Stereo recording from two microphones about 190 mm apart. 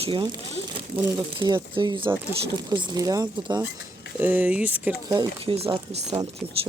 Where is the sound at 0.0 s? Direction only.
25° right (ahead or behind).